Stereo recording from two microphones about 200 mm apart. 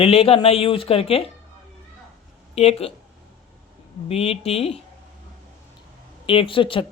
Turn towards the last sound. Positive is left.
turn(degrees=25)  # may be behind; listen again after turning